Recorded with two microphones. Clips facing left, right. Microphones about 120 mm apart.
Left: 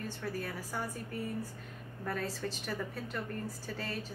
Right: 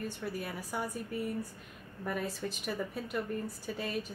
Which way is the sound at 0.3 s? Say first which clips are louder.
Right 1 dB; 15° right (ahead or behind).